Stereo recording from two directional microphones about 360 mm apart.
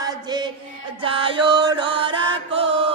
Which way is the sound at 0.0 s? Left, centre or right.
Centre.